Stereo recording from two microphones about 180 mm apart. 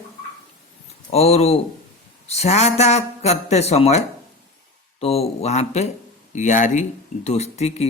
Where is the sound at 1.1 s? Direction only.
35° left (ahead or behind).